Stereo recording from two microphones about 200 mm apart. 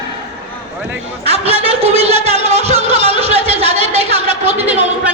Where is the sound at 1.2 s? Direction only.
30° right (ahead or behind).